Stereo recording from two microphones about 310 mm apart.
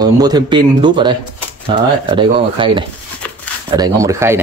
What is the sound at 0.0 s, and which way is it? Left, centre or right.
Speech, centre.